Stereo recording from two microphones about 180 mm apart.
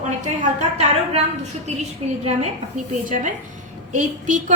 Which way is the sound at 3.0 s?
45° right (ahead or behind).